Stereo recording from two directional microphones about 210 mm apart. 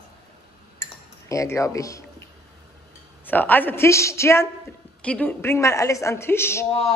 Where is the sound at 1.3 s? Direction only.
15° left (ahead or behind).